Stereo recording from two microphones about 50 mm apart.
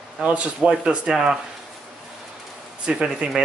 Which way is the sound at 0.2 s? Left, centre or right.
Right.